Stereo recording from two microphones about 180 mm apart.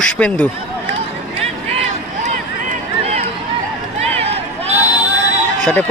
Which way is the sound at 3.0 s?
35° right (ahead or behind).